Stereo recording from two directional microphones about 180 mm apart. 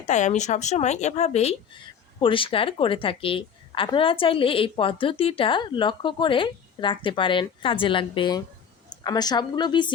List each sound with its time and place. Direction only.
0.1 s a woman's voice: 40° left (ahead or behind); by 9.9 s 25° left (ahead or behind)